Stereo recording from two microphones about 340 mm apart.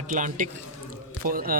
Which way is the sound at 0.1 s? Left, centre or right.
Right.